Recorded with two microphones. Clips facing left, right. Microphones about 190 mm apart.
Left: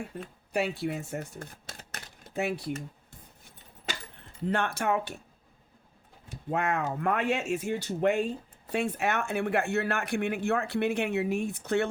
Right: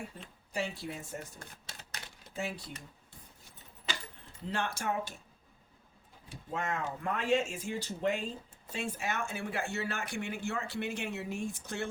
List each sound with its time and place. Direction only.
0.1 s speech: 55° left (ahead or behind)
1.8 s typewriter: 55° left (ahead or behind)
4.4 s speech: 60° left (ahead or behind)
6.5 s speech: 65° left (ahead or behind)